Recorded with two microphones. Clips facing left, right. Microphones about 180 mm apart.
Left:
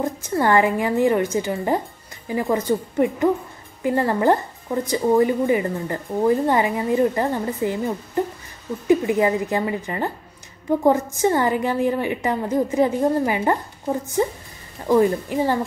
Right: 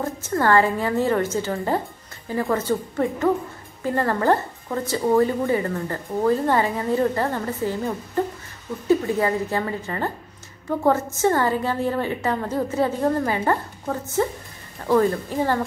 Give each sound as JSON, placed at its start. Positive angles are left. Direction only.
{"t": 0.0, "sound": "speech", "side_deg": 15}